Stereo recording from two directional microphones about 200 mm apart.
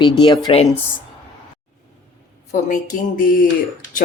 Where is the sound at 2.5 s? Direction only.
40° left (ahead or behind).